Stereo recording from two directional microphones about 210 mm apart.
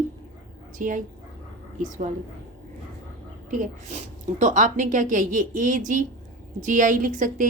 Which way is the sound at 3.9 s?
35° right (ahead or behind).